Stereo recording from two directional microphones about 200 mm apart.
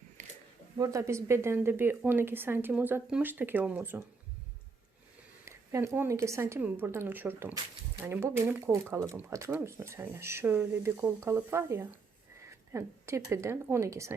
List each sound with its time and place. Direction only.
0.2 s a sound: 40° right (ahead or behind)
0.8 s a woman's voice: 15° right (ahead or behind)
5.5 s a woman's voice: 15° right (ahead or behind)